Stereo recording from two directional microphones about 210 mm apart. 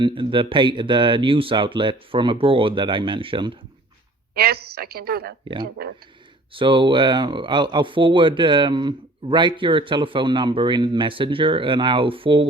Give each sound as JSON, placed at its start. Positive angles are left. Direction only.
{"t": 0.0, "sound": "speech", "side_deg": -25}
{"t": 4.4, "sound": "a woman's voice", "side_deg": -50}
{"t": 6.5, "sound": "speech", "side_deg": -25}